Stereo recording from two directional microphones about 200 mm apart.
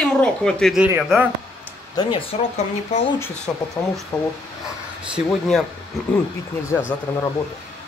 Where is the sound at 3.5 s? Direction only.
5° left (ahead or behind).